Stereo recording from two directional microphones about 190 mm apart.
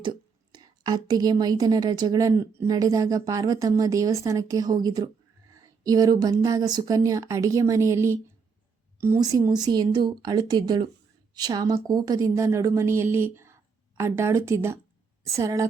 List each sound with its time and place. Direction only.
0.5 s a woman's voice: 20° right (ahead or behind)